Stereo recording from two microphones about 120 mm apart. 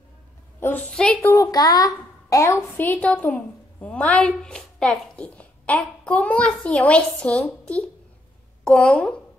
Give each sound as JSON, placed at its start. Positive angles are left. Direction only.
{"t": 0.6, "sound": "a sound", "side_deg": 15}
{"t": 0.9, "sound": "a woman's voice", "side_deg": 10}
{"t": 1.3, "sound": "a woman's voice", "side_deg": 30}